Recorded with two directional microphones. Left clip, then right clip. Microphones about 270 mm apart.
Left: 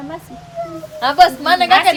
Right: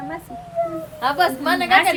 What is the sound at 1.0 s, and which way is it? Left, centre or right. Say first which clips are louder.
Speech: left 8 dB; left.